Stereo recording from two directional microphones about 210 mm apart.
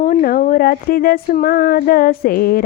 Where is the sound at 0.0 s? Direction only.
40° left (ahead or behind).